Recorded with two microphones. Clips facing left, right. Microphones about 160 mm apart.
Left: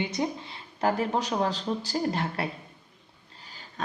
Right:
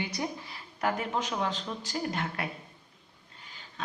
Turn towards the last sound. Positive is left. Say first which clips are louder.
# left 4 dB
turn(degrees=45)  # may be behind; listen again after turning